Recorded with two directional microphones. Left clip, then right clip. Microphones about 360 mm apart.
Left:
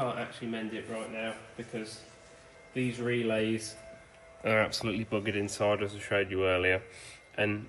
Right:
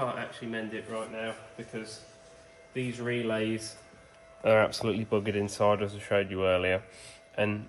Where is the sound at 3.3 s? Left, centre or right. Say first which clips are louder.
Even; centre.